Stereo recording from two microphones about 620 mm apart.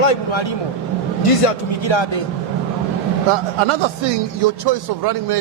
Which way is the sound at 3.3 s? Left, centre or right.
Right.